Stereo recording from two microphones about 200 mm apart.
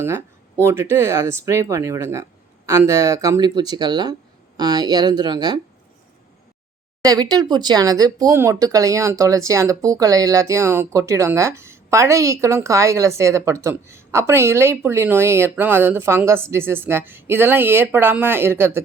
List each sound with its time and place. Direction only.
0.6 s speech: 15° right (ahead or behind)
7.0 s speech: 20° right (ahead or behind)